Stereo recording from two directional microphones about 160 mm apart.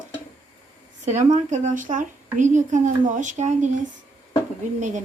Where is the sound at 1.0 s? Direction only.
50° right (ahead or behind).